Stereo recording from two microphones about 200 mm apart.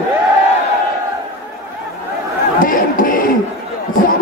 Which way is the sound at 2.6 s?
45° left (ahead or behind).